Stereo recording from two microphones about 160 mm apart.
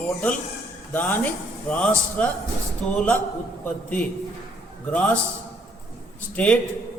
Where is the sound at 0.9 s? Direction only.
15° left (ahead or behind).